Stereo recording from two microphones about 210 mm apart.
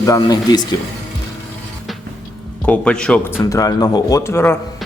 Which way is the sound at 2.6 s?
5° left (ahead or behind).